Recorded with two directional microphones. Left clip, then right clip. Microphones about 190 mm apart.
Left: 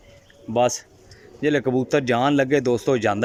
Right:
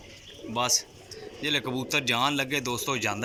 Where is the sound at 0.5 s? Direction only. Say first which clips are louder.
Left 7 dB; 45° left (ahead or behind).